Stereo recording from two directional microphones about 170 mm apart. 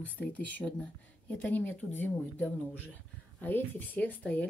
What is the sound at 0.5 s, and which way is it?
Speech, 10° left (ahead or behind).